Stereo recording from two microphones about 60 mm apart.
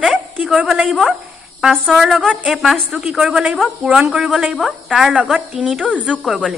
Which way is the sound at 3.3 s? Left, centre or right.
Centre.